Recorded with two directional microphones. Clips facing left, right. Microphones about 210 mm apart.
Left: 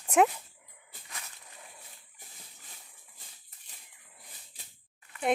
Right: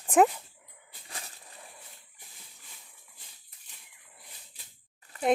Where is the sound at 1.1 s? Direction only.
35° right (ahead or behind).